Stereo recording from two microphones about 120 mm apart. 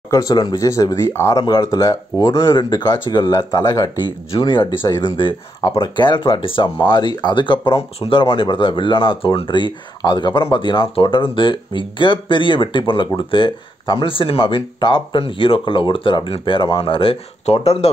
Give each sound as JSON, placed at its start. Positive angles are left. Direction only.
{"t": 0.1, "sound": "speech", "side_deg": 30}
{"t": 4.3, "sound": "speech", "side_deg": 45}